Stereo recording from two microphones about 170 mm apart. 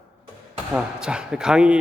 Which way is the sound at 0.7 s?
5° right (ahead or behind).